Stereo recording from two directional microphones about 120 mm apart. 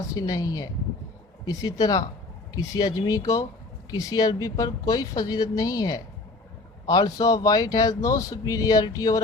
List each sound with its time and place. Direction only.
0.1 s speech: 30° left (ahead or behind)